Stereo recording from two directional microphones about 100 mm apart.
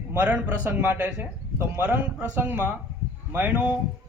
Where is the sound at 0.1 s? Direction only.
15° right (ahead or behind).